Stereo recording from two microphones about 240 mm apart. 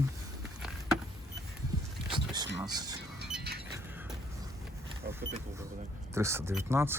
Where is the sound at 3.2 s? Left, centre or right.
Right.